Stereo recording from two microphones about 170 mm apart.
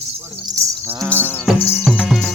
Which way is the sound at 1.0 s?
10° left (ahead or behind).